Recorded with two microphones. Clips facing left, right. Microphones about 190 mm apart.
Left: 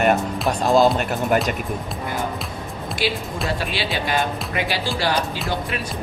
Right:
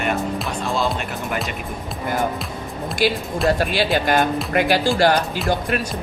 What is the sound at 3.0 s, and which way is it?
Speech, 45° right (ahead or behind).